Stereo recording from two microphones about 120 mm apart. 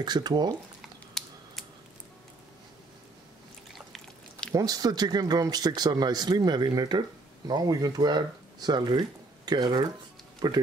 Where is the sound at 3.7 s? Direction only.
Centre (ahead or behind).